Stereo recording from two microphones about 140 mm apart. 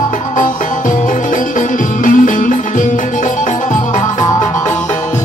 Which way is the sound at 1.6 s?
70° left (ahead or behind).